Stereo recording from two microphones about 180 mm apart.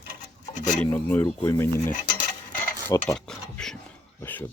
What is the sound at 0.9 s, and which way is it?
Speech, 10° left (ahead or behind).